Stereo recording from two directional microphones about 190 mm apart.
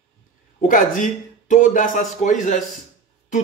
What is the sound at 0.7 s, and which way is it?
A man's voice, 45° left (ahead or behind).